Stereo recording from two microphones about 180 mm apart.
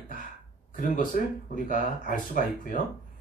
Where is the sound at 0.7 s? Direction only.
45° left (ahead or behind).